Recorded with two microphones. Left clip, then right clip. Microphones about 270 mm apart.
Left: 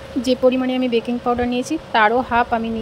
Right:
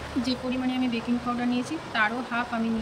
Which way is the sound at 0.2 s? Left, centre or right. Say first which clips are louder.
Left 14 dB; centre.